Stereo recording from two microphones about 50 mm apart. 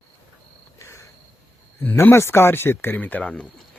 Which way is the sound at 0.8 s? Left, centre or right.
Left.